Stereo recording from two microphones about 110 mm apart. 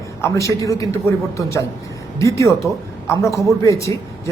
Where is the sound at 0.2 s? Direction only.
30° left (ahead or behind).